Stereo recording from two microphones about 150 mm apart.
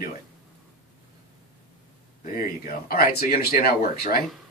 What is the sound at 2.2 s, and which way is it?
Speech, 75° left (ahead or behind).